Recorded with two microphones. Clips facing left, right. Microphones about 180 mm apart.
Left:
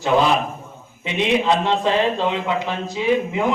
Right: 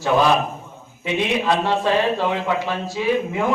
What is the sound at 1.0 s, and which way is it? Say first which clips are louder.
A man's voice: left 2 dB; 20° left (ahead or behind).